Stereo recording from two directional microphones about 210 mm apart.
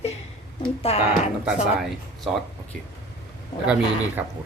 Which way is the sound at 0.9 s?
30° left (ahead or behind).